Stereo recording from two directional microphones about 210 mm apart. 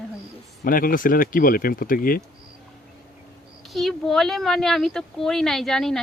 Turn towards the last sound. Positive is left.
turn(degrees=0)  # may be behind; listen again after turning